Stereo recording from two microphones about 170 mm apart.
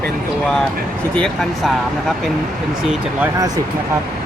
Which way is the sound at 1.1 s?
5° left (ahead or behind).